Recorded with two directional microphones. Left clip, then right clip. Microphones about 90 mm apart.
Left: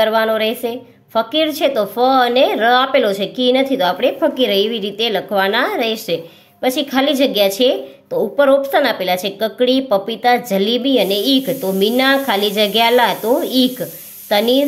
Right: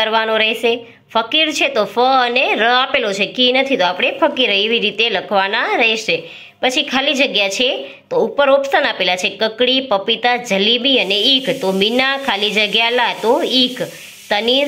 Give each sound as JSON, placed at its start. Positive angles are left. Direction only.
{"t": 0.0, "sound": "a woman's voice", "side_deg": 25}